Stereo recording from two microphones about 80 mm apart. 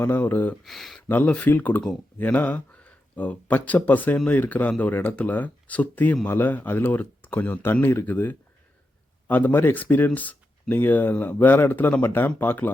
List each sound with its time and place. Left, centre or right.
0.0 s speech: left
0.6 s speech: centre
1.0 s speech: left